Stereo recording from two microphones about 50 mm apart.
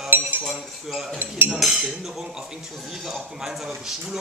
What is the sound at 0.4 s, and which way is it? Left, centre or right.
Cutlery, centre.